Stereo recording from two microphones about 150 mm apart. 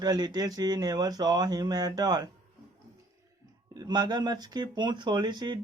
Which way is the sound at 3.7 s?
25° right (ahead or behind).